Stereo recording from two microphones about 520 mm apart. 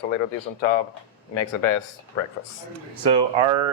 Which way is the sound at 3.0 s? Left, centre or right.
Right.